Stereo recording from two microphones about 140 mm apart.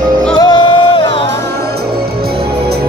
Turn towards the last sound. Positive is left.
turn(degrees=30)  # may be behind; listen again after turning